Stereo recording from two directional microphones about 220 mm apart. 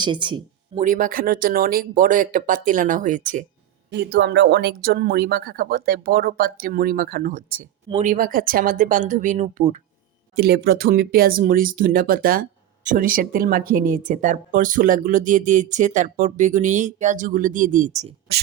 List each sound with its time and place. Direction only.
0.0 s speech: 20° right (ahead or behind)
0.8 s speech: 40° right (ahead or behind)
3.9 s speech: 50° right (ahead or behind); by 9.8 s 30° right (ahead or behind)
10.3 s speech: 45° right (ahead or behind)